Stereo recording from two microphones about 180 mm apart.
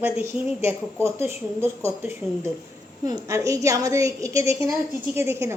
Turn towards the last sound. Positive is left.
turn(degrees=-15)  # may be behind; listen again after turning